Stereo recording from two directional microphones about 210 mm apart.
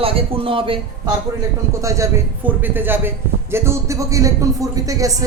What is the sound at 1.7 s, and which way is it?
A man's voice, 15° right (ahead or behind).